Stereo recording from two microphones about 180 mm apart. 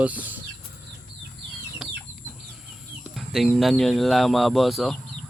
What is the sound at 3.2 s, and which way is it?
Speech, centre (ahead or behind).